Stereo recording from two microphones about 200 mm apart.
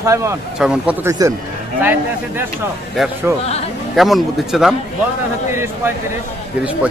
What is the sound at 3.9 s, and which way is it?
Speech, centre (ahead or behind).